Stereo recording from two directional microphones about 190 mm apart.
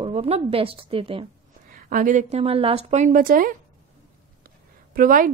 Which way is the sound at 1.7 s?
45° right (ahead or behind).